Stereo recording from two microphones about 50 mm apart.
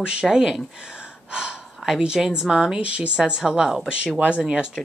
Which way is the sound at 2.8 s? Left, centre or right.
Right.